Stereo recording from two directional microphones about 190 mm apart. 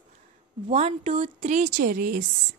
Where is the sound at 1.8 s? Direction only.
50° right (ahead or behind).